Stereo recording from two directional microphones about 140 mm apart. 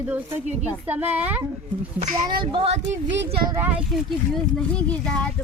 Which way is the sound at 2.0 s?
45° right (ahead or behind).